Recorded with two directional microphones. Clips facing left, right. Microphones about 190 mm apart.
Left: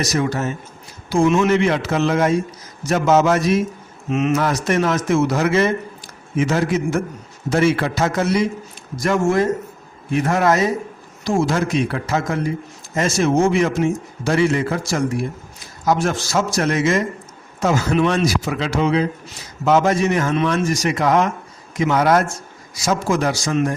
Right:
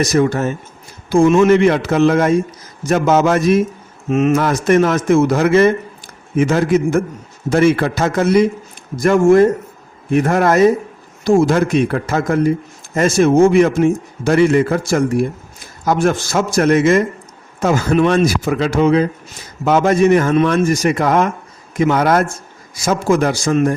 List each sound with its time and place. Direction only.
0.0 s a man's voice: 55° right (ahead or behind)